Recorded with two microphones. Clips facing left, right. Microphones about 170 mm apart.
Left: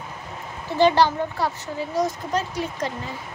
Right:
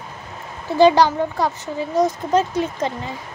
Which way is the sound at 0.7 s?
15° right (ahead or behind).